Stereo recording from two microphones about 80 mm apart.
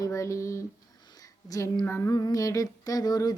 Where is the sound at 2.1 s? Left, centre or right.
Left.